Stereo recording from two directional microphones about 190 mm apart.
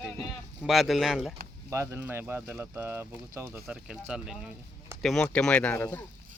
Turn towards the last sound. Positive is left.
turn(degrees=10)  # may be behind; listen again after turning